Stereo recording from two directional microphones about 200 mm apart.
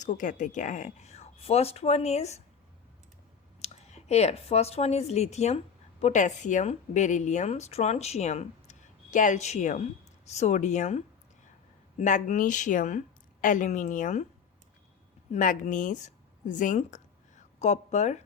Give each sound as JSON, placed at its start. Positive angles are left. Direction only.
{"t": 0.0, "sound": "speech", "side_deg": 40}
{"t": 3.6, "sound": "a woman's voice", "side_deg": 35}
{"t": 15.3, "sound": "a woman's voice", "side_deg": 40}